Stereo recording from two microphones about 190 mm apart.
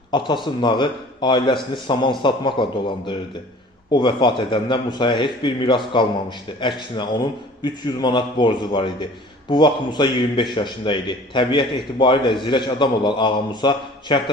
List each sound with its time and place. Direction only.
0.1 s a man's voice: 25° left (ahead or behind)